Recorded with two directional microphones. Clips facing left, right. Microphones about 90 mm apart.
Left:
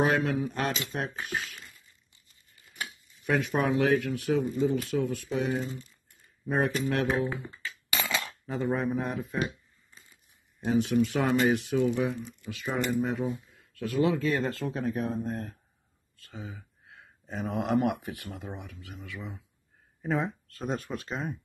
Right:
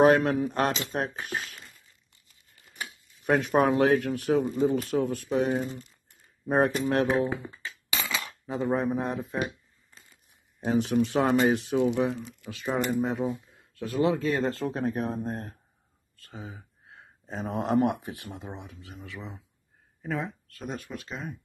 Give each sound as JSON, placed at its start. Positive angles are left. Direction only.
{"t": 0.0, "sound": "speech", "side_deg": -50}
{"t": 3.3, "sound": "speech", "side_deg": -40}
{"t": 7.6, "sound": "a sound", "side_deg": -20}
{"t": 8.5, "sound": "speech", "side_deg": -20}
{"t": 10.6, "sound": "speech", "side_deg": -40}
{"t": 12.1, "sound": "speech", "side_deg": -90}
{"t": 12.4, "sound": "speech", "side_deg": -30}
{"t": 14.7, "sound": "speech", "side_deg": -45}
{"t": 16.2, "sound": "a sound", "side_deg": -40}
{"t": 17.8, "sound": "speech", "side_deg": -20}
{"t": 20.0, "sound": "speech", "side_deg": 20}
{"t": 20.5, "sound": "speech", "side_deg": 40}